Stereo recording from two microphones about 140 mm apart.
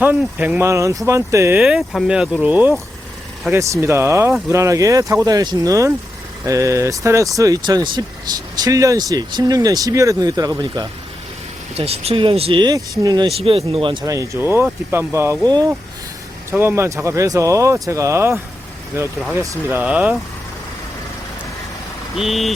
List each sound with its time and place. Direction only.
0.0 s speech: 10° right (ahead or behind)
1.5 s speech: 5° right (ahead or behind); by 10.8 s 25° right (ahead or behind)
11.8 s speech: 45° right (ahead or behind); by 13.3 s 25° right (ahead or behind)
13.4 s speech: 40° right (ahead or behind)
14.0 s speech: 25° right (ahead or behind)
15.4 s speech: 30° right (ahead or behind)
16.5 s speech: 15° right (ahead or behind)
22.1 s speech: centre (ahead or behind)